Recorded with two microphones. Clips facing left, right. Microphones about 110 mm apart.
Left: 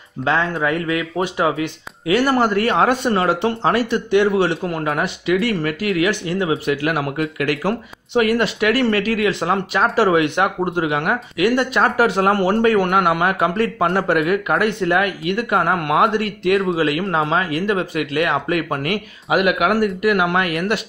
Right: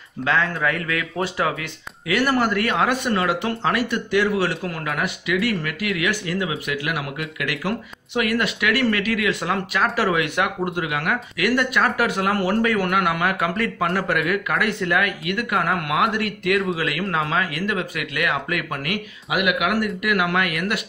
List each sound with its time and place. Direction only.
0.2 s speech: 25° left (ahead or behind)